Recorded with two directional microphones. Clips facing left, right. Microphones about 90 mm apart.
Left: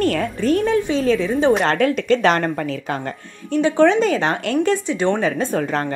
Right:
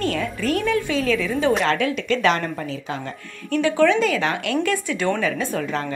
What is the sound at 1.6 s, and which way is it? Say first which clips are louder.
A woman's voice: left 4 dB; 45° left (ahead or behind).